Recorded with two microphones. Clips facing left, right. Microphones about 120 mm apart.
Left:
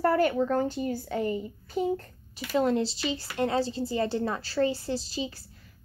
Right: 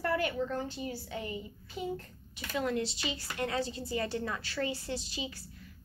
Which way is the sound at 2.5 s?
30° left (ahead or behind).